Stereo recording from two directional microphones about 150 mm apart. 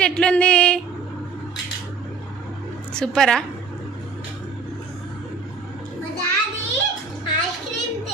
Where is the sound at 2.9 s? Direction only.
5° left (ahead or behind).